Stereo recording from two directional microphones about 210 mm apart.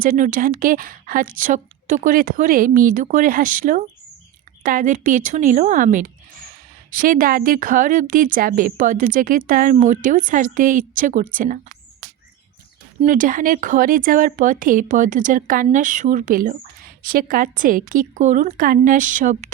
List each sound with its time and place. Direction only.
0.0 s speech: 40° right (ahead or behind)
13.0 s speech: 40° right (ahead or behind)